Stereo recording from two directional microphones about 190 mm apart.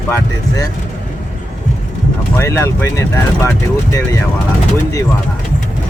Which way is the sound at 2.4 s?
15° left (ahead or behind).